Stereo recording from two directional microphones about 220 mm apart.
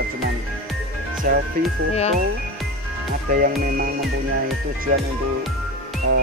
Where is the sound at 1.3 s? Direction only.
40° right (ahead or behind).